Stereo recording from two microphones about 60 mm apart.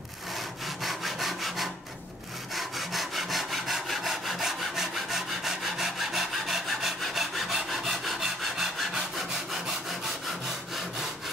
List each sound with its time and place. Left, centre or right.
0.8 s wood: centre
2.5 s sawing: centre